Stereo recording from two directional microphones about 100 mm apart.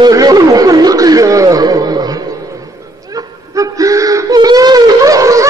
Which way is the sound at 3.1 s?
35° right (ahead or behind).